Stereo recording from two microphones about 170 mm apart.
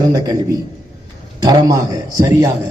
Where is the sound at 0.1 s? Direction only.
25° right (ahead or behind).